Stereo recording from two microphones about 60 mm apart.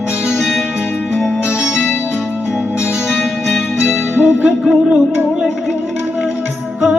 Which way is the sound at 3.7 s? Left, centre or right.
Centre.